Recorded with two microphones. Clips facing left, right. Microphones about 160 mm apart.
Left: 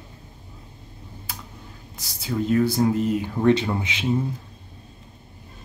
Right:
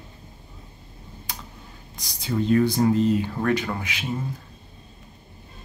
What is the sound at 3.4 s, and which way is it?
Speech, 25° left (ahead or behind).